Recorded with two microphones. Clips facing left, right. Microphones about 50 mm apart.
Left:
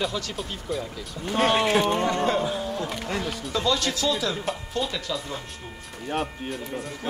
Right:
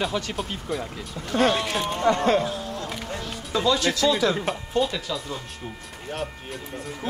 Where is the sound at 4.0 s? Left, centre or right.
Right.